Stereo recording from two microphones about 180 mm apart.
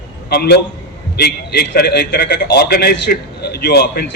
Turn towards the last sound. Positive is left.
turn(degrees=60)  # may be behind; listen again after turning